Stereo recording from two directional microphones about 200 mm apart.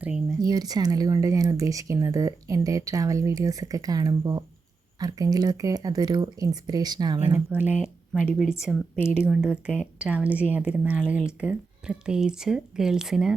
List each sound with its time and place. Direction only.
0.3 s speech: 20° right (ahead or behind)
7.3 s a woman's voice: 10° right (ahead or behind)